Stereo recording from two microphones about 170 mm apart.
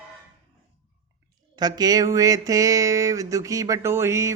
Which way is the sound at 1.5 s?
25° right (ahead or behind).